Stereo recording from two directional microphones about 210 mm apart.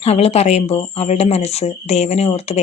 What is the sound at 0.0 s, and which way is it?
Speech, 30° left (ahead or behind).